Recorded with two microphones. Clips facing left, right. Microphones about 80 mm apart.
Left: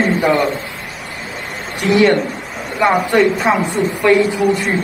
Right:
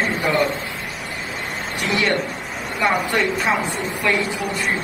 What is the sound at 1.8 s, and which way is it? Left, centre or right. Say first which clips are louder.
A woman's voice: left 9 dB; left.